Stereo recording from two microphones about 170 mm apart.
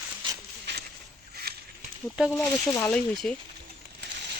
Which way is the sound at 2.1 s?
Centre (ahead or behind).